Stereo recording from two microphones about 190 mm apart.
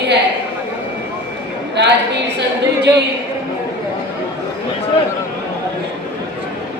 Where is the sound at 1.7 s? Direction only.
65° right (ahead or behind).